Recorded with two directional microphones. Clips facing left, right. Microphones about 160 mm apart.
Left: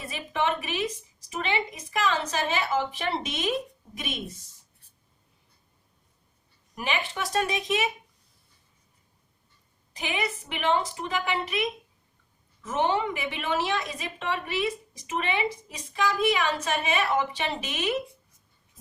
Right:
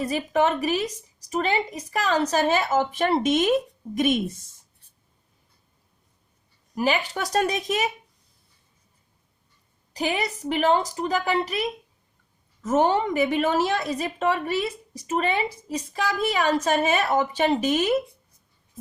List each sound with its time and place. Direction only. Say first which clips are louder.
0.0 s a woman's voice: right 7 dB; 40° right (ahead or behind)
6.7 s a woman's voice: right 6 dB; 35° right (ahead or behind)
9.9 s a woman's voice: right 5 dB; 40° right (ahead or behind)